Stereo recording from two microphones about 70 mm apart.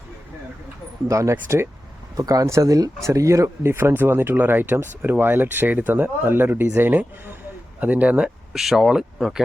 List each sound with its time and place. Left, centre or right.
1.0 s speech: right
2.1 s speech: right
8.5 s speech: centre